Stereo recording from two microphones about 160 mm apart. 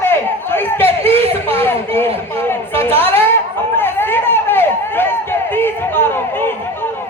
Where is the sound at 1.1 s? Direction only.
40° right (ahead or behind).